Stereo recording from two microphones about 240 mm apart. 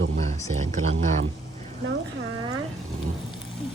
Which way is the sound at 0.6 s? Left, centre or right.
Right.